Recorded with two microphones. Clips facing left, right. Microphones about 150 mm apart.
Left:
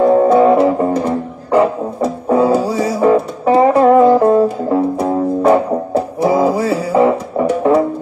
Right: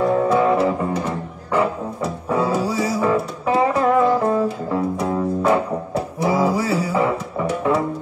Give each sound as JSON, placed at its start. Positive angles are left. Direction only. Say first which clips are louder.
{"t": 0.0, "sound": "music", "louder": "left 8 dB", "side_deg": 35}
{"t": 2.2, "sound": "music", "louder": "left 8 dB", "side_deg": 30}